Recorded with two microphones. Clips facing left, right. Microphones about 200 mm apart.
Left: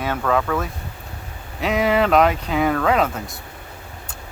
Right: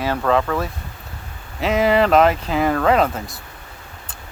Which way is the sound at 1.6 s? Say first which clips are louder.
Right 2 dB; centre (ahead or behind).